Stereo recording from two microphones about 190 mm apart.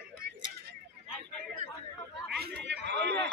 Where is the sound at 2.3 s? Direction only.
55° right (ahead or behind).